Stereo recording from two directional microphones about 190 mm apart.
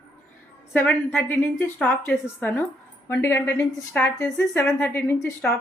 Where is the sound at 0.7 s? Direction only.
10° left (ahead or behind).